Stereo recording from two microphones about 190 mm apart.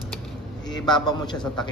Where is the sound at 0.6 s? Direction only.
20° left (ahead or behind).